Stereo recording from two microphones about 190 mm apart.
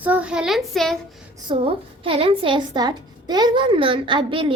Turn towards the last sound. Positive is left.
turn(degrees=-25)  # may be behind; listen again after turning